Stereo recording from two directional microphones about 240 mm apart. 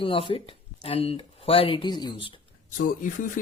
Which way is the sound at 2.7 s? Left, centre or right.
Left.